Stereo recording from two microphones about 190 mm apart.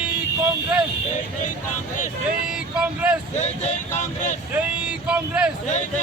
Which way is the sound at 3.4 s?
40° left (ahead or behind).